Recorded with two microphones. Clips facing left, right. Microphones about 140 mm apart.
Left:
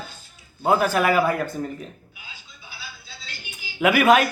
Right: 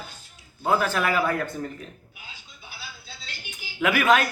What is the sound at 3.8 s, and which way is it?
Speech, 10° left (ahead or behind).